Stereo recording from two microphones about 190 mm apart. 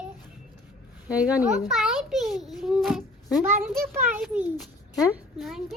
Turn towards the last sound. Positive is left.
turn(degrees=0)  # may be behind; listen again after turning